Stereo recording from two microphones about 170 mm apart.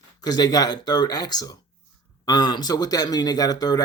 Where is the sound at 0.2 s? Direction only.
25° left (ahead or behind).